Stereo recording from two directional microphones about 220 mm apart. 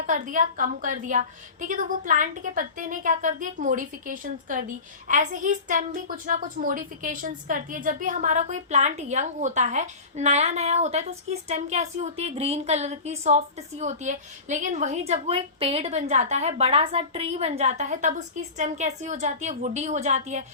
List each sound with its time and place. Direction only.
0.0 s a woman's voice: 35° right (ahead or behind)